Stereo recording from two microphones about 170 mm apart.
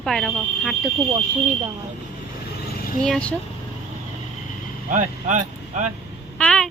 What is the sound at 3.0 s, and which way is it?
Speech, 5° left (ahead or behind).